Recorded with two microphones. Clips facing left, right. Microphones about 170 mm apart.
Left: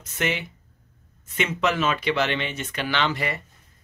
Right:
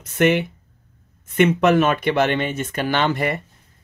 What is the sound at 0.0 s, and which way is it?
Speech, 60° right (ahead or behind).